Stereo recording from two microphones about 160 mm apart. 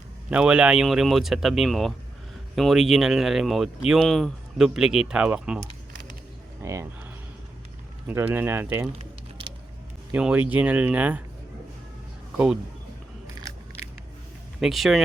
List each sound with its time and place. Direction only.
0.3 s speech: 5° right (ahead or behind)
10.1 s speech: 10° right (ahead or behind)
14.6 s speech: centre (ahead or behind)